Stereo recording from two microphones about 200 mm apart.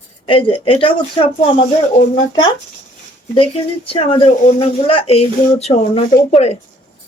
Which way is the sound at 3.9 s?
25° left (ahead or behind).